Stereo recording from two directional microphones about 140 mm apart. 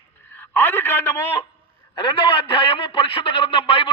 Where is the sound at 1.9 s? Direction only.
40° left (ahead or behind).